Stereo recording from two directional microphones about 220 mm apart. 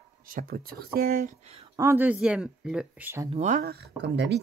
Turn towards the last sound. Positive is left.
turn(degrees=-50)  # may be behind; listen again after turning